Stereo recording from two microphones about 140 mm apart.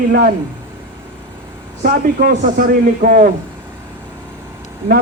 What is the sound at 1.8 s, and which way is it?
A man's voice, 90° right.